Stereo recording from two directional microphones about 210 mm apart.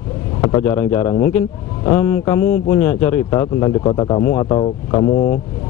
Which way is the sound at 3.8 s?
20° left (ahead or behind).